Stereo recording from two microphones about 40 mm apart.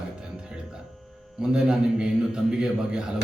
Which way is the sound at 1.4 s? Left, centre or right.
Centre.